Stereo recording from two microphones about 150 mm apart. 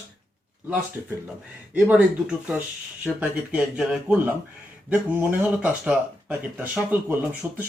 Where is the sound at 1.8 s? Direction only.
10° right (ahead or behind).